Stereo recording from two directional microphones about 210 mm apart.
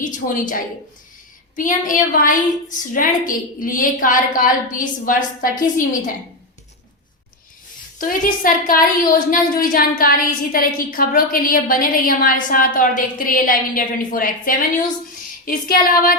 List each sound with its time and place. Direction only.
0.0 s a woman's voice: 40° left (ahead or behind)
7.9 s a woman's voice: 40° left (ahead or behind)